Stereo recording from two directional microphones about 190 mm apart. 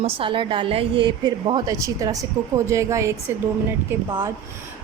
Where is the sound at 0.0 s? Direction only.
25° right (ahead or behind).